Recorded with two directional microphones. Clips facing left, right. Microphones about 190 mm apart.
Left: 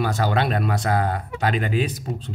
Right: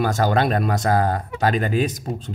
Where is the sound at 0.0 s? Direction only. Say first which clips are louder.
Right 3 dB; 45° right (ahead or behind).